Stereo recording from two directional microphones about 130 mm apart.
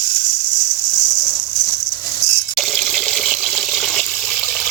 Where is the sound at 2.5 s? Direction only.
Centre (ahead or behind).